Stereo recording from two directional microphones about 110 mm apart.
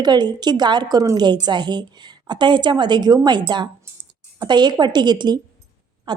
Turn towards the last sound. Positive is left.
turn(degrees=-45)  # may be behind; listen again after turning